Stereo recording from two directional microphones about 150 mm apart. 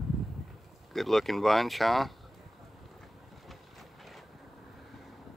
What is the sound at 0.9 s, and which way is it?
Speech, centre (ahead or behind).